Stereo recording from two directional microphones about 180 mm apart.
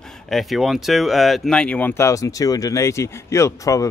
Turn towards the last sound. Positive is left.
turn(degrees=20)  # may be behind; listen again after turning